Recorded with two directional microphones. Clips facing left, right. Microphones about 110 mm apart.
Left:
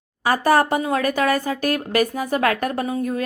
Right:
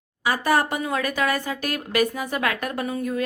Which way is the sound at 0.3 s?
40° left (ahead or behind).